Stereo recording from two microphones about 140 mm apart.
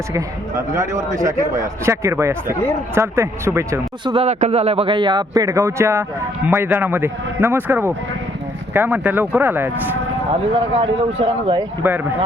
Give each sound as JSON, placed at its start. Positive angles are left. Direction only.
{"t": 0.1, "sound": "a man's voice", "side_deg": -25}
{"t": 4.0, "sound": "a man's voice", "side_deg": -40}
{"t": 10.8, "sound": "speech", "side_deg": -45}
{"t": 11.8, "sound": "a man's voice", "side_deg": -15}